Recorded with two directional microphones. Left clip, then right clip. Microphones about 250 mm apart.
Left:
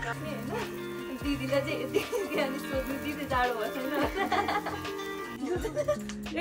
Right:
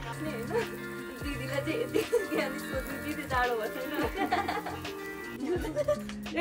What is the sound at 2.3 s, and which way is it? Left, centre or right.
Speech, centre.